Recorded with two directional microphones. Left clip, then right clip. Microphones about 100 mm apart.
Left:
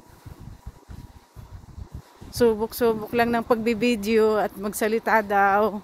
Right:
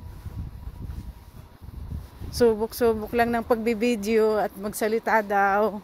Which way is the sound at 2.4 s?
15° left (ahead or behind).